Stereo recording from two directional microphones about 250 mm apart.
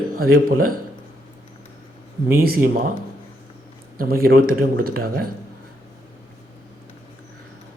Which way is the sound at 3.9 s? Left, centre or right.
Right.